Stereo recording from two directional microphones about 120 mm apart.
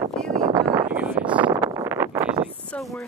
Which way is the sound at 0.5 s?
35° right (ahead or behind).